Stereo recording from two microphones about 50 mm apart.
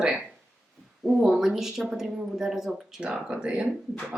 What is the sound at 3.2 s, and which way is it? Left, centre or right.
Speech, right.